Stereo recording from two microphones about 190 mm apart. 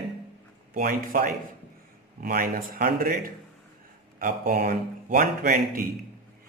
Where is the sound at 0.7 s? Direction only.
45° right (ahead or behind).